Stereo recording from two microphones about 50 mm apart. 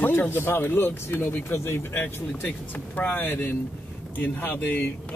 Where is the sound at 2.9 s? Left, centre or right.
Left.